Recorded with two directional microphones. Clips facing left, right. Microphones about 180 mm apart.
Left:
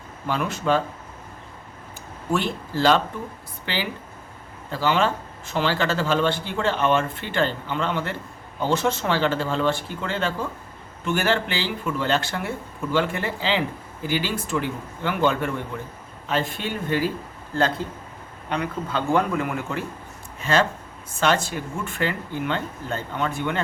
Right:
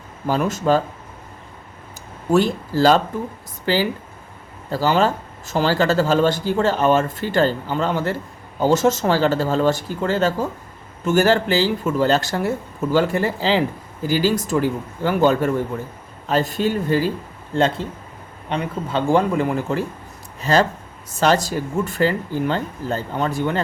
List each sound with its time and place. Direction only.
0.3 s a man's voice: 40° right (ahead or behind)
2.3 s a man's voice: 40° right (ahead or behind)
18.4 s a man's voice: 25° right (ahead or behind)